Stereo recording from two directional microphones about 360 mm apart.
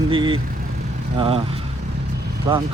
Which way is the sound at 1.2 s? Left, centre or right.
Centre.